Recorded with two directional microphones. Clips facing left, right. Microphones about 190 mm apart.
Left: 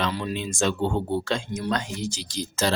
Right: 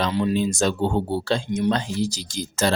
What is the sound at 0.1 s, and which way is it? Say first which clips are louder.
Speech: right 7 dB; 25° right (ahead or behind).